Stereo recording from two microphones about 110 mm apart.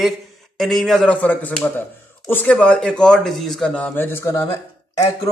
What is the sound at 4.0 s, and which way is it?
Speech, 20° left (ahead or behind).